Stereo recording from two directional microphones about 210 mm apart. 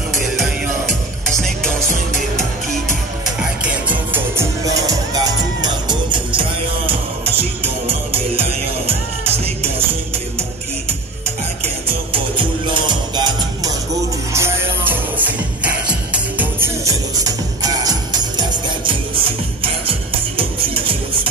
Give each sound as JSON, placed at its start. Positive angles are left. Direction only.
{"t": 3.6, "sound": "music", "side_deg": -10}
{"t": 12.1, "sound": "music", "side_deg": -25}
{"t": 20.3, "sound": "music", "side_deg": -25}